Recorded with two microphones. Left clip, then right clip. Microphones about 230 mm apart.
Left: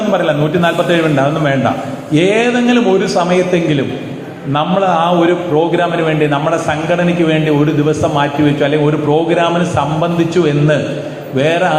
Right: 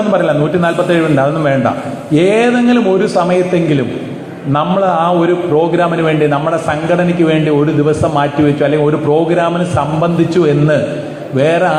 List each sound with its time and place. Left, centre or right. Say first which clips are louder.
0.1 s a man's voice: even; right